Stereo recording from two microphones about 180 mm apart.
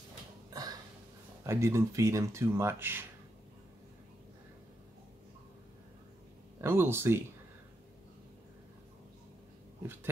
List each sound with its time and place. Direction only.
0.5 s a sound: 20° right (ahead or behind)
1.4 s speech: 15° right (ahead or behind)
6.6 s speech: 15° right (ahead or behind)